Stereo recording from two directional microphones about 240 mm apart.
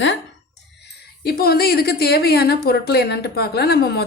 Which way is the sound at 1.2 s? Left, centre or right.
Left.